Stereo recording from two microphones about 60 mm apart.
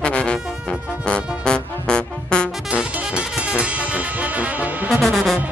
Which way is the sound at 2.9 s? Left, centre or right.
Centre.